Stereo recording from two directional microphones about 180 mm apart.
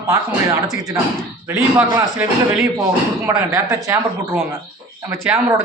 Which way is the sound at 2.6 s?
Centre (ahead or behind).